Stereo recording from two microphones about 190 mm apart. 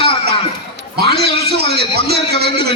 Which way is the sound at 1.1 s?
60° right (ahead or behind).